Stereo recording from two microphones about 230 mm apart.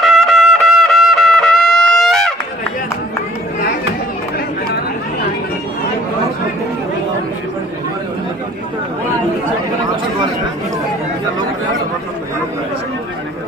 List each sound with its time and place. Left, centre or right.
0.0 s music: centre